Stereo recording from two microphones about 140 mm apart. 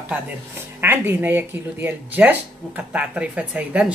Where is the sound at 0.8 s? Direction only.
15° right (ahead or behind).